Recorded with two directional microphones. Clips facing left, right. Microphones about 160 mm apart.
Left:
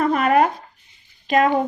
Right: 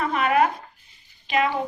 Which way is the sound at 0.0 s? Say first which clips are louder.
Left 4 dB; 40° left (ahead or behind).